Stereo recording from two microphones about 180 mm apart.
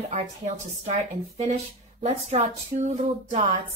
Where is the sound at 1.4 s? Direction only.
35° right (ahead or behind).